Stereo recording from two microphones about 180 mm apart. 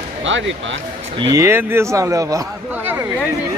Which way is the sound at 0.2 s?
90° right.